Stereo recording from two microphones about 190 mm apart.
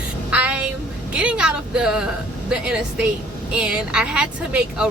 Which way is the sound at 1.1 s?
5° right (ahead or behind).